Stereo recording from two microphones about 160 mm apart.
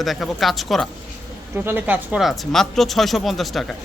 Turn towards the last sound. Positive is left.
turn(degrees=0)  # may be behind; listen again after turning